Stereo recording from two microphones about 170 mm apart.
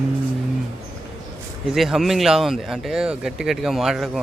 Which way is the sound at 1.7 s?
Centre (ahead or behind).